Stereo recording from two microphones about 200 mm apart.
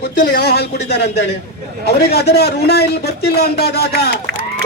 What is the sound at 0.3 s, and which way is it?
A man's voice, 55° left (ahead or behind).